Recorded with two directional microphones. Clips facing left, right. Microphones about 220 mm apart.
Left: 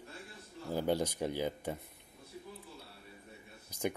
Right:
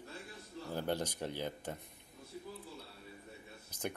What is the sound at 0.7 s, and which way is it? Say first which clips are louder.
Speech: left 5 dB; 10° left (ahead or behind).